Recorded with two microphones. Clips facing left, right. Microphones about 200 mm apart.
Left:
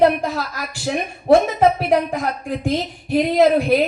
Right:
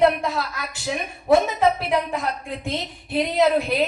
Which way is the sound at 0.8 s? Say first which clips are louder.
Left 5 dB; 30° left (ahead or behind).